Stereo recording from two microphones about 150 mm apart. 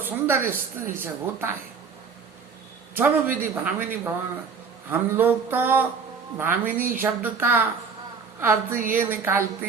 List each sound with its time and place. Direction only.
0.0 s speech: 15° right (ahead or behind)
2.9 s speech: 10° right (ahead or behind)